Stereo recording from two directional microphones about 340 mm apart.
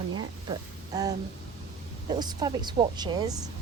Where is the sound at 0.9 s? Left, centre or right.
Centre.